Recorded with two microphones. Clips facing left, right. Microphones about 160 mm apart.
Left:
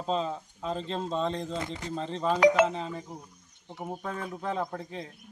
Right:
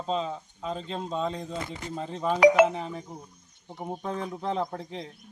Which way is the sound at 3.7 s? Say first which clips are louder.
Right 2 dB; 5° left (ahead or behind).